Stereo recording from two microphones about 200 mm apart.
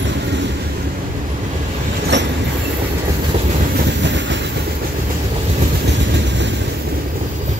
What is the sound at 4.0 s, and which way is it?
Train, 65° right (ahead or behind).